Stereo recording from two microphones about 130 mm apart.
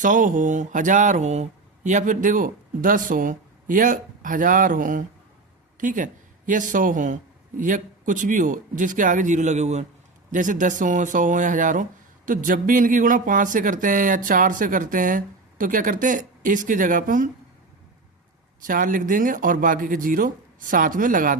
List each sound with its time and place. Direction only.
0.0 s a man's voice: 85° right; by 9.8 s 60° right (ahead or behind)
10.3 s speech: 80° right
18.6 s speech: 90° right